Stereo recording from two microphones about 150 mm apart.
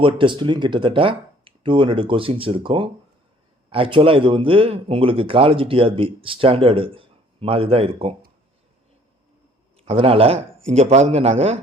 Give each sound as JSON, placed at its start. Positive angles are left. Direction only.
{"t": 0.0, "sound": "speech", "side_deg": -35}
{"t": 9.7, "sound": "speech", "side_deg": -40}